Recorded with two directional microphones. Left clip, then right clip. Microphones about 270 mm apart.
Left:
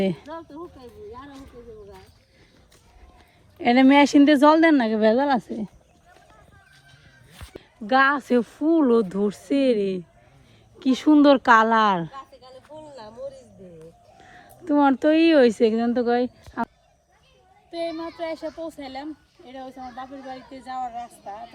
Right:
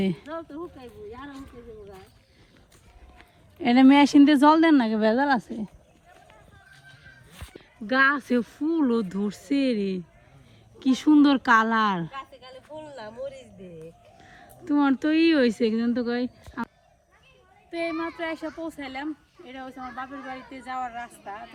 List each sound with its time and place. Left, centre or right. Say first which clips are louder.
0.0 s a woman's voice: left 4 dB; centre
0.3 s speech: right 1 dB; centre
3.6 s speech: left 2 dB; centre
7.3 s a woman's voice: left 4 dB; centre
12.8 s a sound: even; centre
14.2 s speech: left 2 dB; centre
17.7 s a woman's voice: even; centre